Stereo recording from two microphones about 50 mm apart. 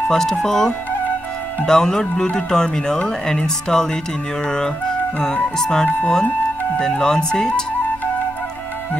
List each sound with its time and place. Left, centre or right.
0.1 s speech: centre
4.5 s music: centre
5.6 s speech: centre
5.9 s speech: left
6.8 s speech: centre